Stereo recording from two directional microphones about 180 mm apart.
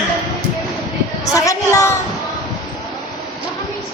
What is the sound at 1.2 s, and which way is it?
Speech, 20° left (ahead or behind).